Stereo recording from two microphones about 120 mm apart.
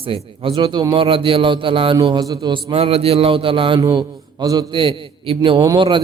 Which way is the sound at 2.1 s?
35° right (ahead or behind).